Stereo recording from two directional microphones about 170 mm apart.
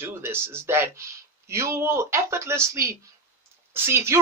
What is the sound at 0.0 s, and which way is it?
Speech, 15° right (ahead or behind).